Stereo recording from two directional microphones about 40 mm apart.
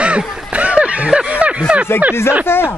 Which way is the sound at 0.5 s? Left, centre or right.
Right.